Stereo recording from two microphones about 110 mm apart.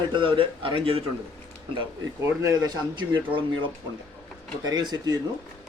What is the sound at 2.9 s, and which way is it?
A man's voice, 45° right (ahead or behind).